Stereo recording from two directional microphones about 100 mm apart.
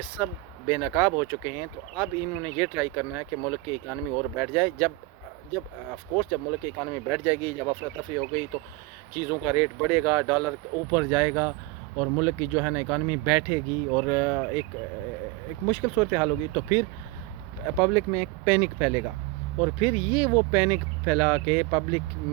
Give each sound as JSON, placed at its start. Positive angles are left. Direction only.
{"t": 0.2, "sound": "speech", "side_deg": -15}
{"t": 6.1, "sound": "speech", "side_deg": -15}
{"t": 15.6, "sound": "speech", "side_deg": -15}